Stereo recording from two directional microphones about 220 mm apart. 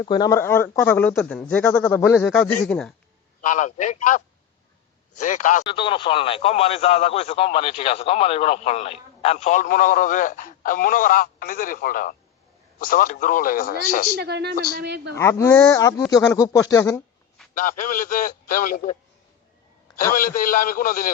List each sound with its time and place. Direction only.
0.0 s speech: 20° left (ahead or behind)
3.4 s a man's voice: 35° left (ahead or behind)
5.2 s a man's voice: 35° left (ahead or behind)
5.6 s a man's voice: 25° left (ahead or behind); by 14.1 s 40° left (ahead or behind)
14.2 s a man's voice: 50° right (ahead or behind)
15.1 s speech: 15° left (ahead or behind)
17.6 s a man's voice: 40° left (ahead or behind)
20.1 s a man's voice: 40° left (ahead or behind)